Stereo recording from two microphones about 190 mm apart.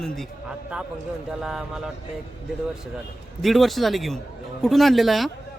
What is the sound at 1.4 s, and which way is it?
Speech, 5° right (ahead or behind).